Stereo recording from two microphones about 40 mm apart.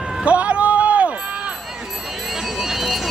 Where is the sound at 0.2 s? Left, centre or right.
Right.